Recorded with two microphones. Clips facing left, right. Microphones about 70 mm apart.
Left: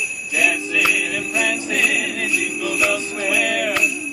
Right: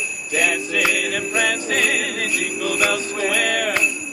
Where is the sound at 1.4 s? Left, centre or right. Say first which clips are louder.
Even; right.